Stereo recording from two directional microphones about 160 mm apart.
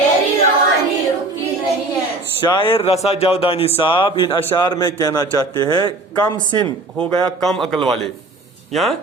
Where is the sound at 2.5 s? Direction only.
30° left (ahead or behind).